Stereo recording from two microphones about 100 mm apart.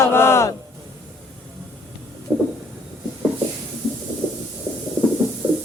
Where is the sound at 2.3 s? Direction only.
15° right (ahead or behind).